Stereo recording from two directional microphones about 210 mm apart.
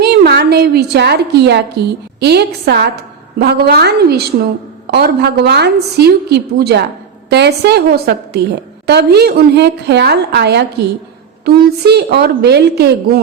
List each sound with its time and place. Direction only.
0.0 s a woman's voice: 50° right (ahead or behind)